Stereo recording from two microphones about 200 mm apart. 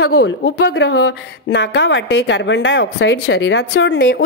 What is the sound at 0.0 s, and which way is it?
A woman's voice, 60° left (ahead or behind).